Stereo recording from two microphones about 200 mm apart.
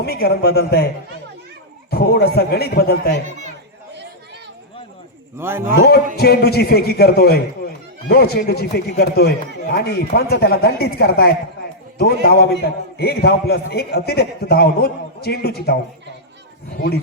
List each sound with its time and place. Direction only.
0.0 s a man's voice: 50° left (ahead or behind)
1.9 s a man's voice: 50° left (ahead or behind)
5.4 s a man's voice: 10° right (ahead or behind)
6.1 s a man's voice: 50° left (ahead or behind)